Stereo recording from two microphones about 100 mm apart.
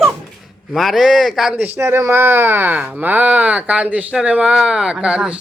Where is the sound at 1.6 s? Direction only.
20° right (ahead or behind).